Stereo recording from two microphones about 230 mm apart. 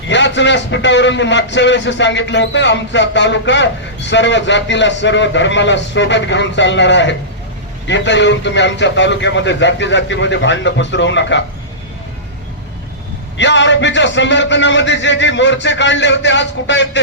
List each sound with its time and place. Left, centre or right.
0.1 s a man's voice: left
13.3 s a man's voice: left